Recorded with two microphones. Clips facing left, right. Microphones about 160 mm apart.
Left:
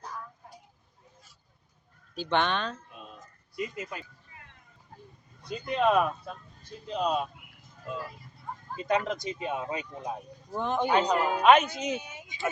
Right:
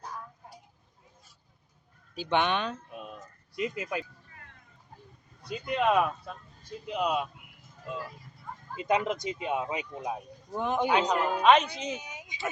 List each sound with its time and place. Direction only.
2.1 s speech: 10° right (ahead or behind)
3.5 s speech: 85° right
5.5 s speech: 5° right (ahead or behind)
8.8 s speech: 15° right (ahead or behind); by 11.9 s 5° left (ahead or behind)
12.0 s a sound: 15° right (ahead or behind)